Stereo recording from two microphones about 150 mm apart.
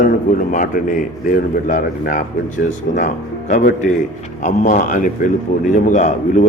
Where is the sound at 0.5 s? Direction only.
60° left (ahead or behind).